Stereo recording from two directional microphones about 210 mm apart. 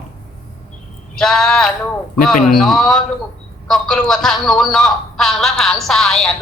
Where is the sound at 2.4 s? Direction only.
40° left (ahead or behind).